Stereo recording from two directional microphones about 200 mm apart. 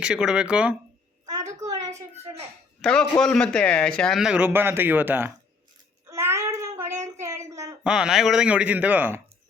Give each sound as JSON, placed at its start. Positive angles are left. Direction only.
{"t": 0.0, "sound": "a man's voice", "side_deg": -5}
{"t": 1.4, "sound": "a sound", "side_deg": -15}
{"t": 2.8, "sound": "a man's voice", "side_deg": 5}
{"t": 6.1, "sound": "child singing", "side_deg": -15}
{"t": 7.0, "sound": "a sound", "side_deg": -15}
{"t": 7.9, "sound": "speech", "side_deg": -5}